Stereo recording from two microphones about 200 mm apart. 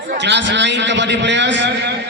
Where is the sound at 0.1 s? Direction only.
60° right (ahead or behind).